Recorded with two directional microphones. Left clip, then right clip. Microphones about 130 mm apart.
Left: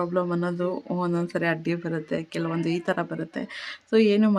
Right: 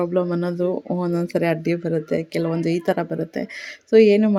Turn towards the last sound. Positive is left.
turn(degrees=-15)  # may be behind; listen again after turning